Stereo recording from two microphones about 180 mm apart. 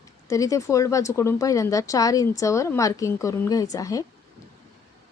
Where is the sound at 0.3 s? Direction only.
20° left (ahead or behind).